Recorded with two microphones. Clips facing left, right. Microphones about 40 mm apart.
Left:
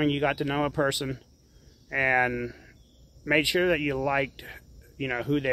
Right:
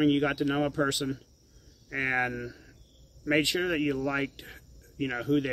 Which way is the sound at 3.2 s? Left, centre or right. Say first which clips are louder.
Left 3 dB; centre.